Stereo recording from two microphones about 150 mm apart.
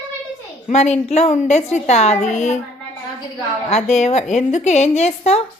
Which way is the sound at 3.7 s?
45° left (ahead or behind).